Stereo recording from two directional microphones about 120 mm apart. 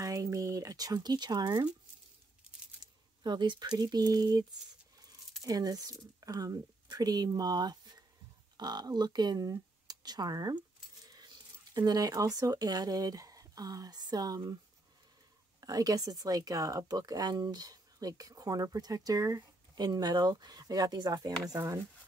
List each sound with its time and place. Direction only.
0.0 s a sound: 25° right (ahead or behind)
2.8 s speech: 40° right (ahead or behind)
15.6 s speech: 30° right (ahead or behind)